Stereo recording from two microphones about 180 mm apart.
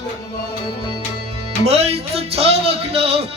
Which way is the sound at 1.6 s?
35° right (ahead or behind).